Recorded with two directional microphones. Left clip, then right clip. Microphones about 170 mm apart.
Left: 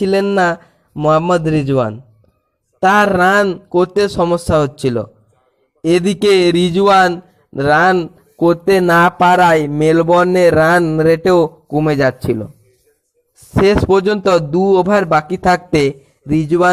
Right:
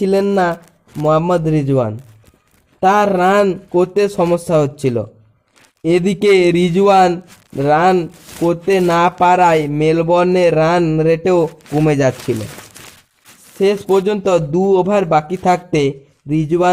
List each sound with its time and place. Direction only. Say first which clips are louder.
0.0 s a man's voice: left 1 dB; 20° left (ahead or behind)
13.5 s a man's voice: left 3 dB; 20° left (ahead or behind)